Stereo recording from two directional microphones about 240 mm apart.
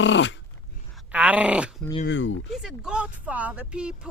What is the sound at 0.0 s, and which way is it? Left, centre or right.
Dog, left.